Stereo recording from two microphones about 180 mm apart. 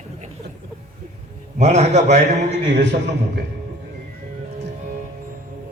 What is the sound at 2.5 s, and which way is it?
Speech, 75° right (ahead or behind).